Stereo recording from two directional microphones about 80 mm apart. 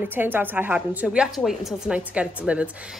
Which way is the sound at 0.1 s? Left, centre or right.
Right.